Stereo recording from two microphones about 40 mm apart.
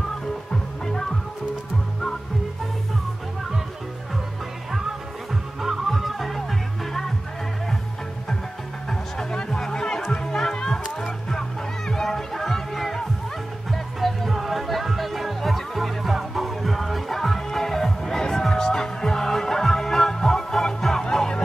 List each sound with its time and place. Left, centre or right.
0.5 s music: centre
5.3 s music: centre
9.2 s music: centre